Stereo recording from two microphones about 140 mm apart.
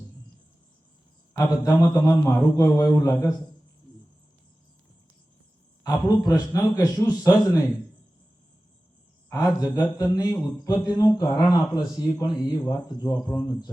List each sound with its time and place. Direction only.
1.3 s a man's voice: 25° left (ahead or behind)
5.8 s a man's voice: 25° left (ahead or behind)
9.3 s a man's voice: 25° left (ahead or behind)